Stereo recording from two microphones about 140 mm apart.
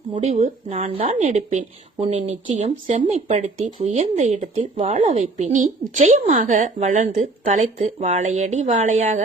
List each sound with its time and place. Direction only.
0.2 s a woman's voice: 50° right (ahead or behind)
3.4 s speech: 50° right (ahead or behind)
4.5 s a woman's voice: 45° right (ahead or behind)